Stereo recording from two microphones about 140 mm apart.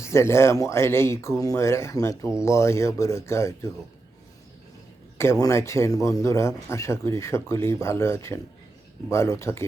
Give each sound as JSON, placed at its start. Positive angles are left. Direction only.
{"t": 0.0, "sound": "speech", "side_deg": 20}
{"t": 5.1, "sound": "speech", "side_deg": 20}